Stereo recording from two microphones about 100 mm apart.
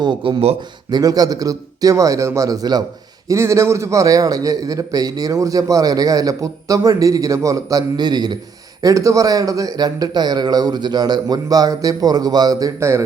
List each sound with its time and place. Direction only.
0.0 s speech: 55° right (ahead or behind)
0.9 s a man's voice: 40° right (ahead or behind)
3.2 s a man's voice: 30° right (ahead or behind); by 8.4 s 45° right (ahead or behind)
8.8 s a man's voice: 35° right (ahead or behind)